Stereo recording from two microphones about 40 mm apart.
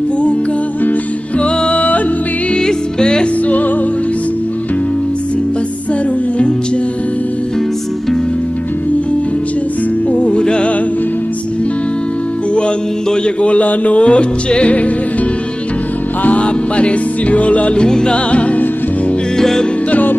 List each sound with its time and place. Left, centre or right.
1.4 s music: left
2.6 s music: left
3.4 s music: left
10.1 s music: left
12.5 s music: left
13.7 s mantra: left
14.0 s music: left
16.2 s music: left
17.8 s music: centre
18.1 s music: left
19.3 s music: centre
19.9 s music: left